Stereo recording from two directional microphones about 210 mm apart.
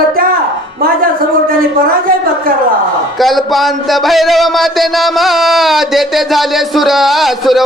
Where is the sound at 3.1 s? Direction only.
Centre (ahead or behind).